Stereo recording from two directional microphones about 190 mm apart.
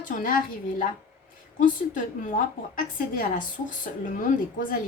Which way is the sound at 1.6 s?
45° left (ahead or behind).